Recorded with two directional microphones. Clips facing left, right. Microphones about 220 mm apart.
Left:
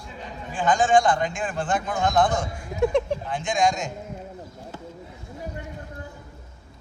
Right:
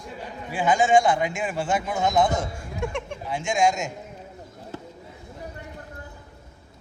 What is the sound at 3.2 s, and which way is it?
Speech, 5° right (ahead or behind).